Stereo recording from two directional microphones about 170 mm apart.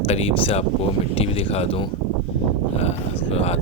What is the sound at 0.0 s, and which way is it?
Speech, 35° left (ahead or behind).